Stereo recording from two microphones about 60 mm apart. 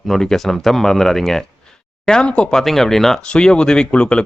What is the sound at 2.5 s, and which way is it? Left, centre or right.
Speech, centre.